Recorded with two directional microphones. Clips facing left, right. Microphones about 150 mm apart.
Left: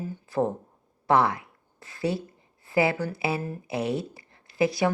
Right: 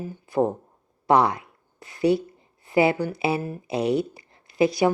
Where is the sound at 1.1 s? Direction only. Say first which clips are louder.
Right 3 dB; 20° right (ahead or behind).